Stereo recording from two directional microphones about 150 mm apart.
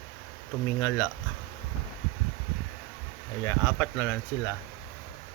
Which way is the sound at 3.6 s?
10° left (ahead or behind).